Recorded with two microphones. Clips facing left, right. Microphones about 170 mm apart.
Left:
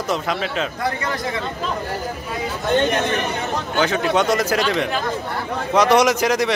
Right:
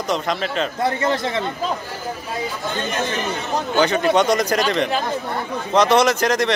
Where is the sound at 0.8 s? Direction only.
25° right (ahead or behind).